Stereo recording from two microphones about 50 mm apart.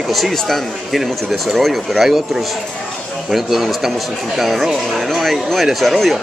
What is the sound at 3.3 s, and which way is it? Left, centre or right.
Speech, centre.